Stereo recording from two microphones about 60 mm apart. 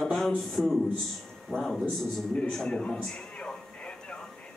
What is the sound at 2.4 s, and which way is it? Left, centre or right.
Television, centre.